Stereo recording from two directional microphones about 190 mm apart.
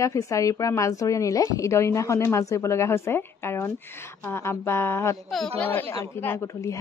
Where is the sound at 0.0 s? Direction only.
15° left (ahead or behind).